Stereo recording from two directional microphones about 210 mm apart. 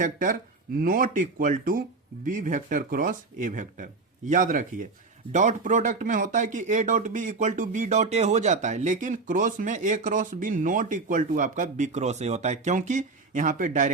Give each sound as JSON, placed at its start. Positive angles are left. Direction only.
{"t": 0.0, "sound": "speech", "side_deg": -40}